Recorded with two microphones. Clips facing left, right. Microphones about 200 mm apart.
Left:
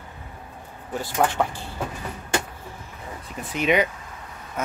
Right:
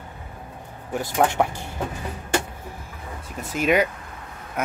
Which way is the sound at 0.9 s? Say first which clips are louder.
Right 2 dB; 15° right (ahead or behind).